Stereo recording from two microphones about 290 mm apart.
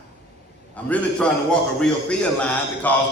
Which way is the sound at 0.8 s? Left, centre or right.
Centre.